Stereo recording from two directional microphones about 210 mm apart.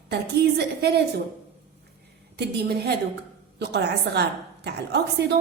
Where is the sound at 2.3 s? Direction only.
50° right (ahead or behind).